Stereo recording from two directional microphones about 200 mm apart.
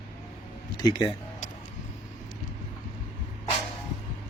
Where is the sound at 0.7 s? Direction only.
20° left (ahead or behind).